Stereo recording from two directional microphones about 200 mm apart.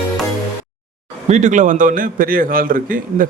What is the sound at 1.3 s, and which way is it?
A man's voice, 35° right (ahead or behind).